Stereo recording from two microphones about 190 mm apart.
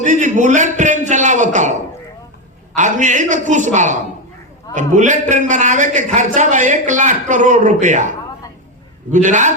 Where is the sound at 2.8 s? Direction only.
40° right (ahead or behind).